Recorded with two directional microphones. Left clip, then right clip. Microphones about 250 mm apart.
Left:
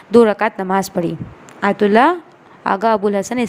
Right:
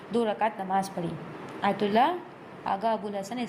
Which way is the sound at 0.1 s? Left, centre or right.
Left.